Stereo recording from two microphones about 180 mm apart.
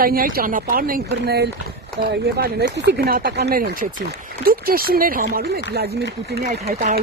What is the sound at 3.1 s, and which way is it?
Speech, 60° right (ahead or behind).